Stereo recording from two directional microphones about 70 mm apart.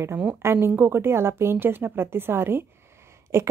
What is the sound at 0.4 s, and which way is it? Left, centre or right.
A woman's voice, right.